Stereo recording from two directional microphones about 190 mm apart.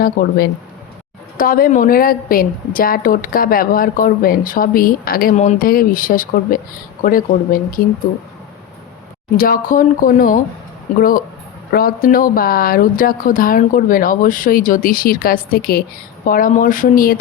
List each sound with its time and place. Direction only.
0.0 s a woman's voice: 50° left (ahead or behind)
9.4 s a woman's voice: 50° left (ahead or behind)
11.7 s a woman's voice: 50° left (ahead or behind)